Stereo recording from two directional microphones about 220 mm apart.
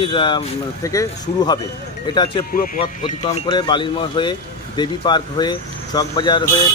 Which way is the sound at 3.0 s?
25° left (ahead or behind).